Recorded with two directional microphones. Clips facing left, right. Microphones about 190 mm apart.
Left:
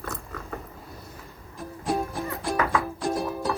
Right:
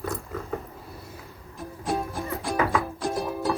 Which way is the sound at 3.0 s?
Centre (ahead or behind).